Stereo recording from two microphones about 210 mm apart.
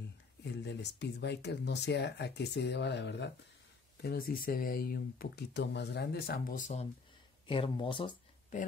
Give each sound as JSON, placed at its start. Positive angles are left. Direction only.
{"t": 0.5, "sound": "speech", "side_deg": 55}
{"t": 7.4, "sound": "speech", "side_deg": 25}